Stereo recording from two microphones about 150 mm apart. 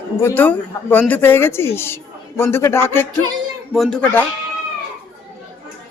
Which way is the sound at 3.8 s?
5° left (ahead or behind).